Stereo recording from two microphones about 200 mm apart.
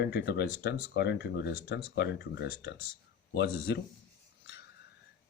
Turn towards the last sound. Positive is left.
turn(degrees=55)  # may be behind; listen again after turning